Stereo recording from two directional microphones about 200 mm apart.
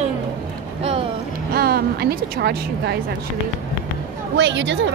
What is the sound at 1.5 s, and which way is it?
Speech, 50° right (ahead or behind).